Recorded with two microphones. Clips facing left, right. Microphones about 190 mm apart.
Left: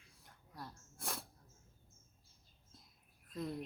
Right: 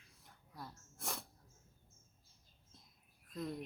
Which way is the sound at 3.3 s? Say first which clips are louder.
Left 1 dB; 5° left (ahead or behind).